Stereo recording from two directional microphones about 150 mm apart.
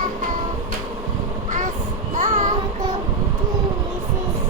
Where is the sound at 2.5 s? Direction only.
25° right (ahead or behind).